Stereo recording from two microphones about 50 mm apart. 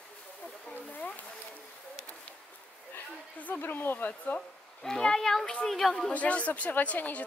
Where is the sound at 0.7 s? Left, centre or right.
Left.